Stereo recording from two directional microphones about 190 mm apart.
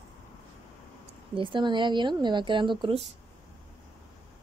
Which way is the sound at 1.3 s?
25° right (ahead or behind).